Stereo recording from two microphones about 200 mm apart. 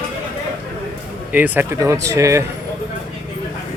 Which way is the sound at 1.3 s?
10° right (ahead or behind).